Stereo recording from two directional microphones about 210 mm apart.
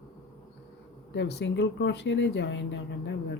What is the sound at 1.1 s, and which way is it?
Speech, 55° left (ahead or behind).